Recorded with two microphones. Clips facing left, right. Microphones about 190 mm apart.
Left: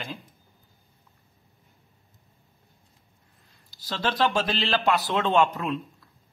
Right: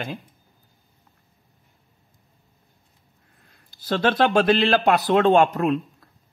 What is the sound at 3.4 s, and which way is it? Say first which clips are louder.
A man's voice: right 10 dB; 55° right (ahead or behind).